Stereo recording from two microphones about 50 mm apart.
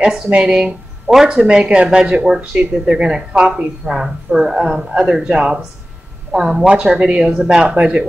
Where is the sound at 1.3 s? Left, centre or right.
Right.